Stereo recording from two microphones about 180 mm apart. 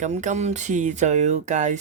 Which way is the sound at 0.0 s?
40° right (ahead or behind).